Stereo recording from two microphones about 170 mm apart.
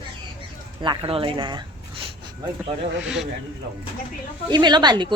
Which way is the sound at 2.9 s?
5° right (ahead or behind).